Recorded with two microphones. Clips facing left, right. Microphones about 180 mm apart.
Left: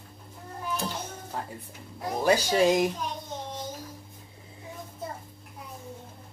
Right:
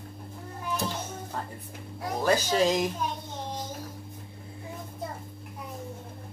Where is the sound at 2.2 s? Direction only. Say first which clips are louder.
Left 2 dB; 10° left (ahead or behind).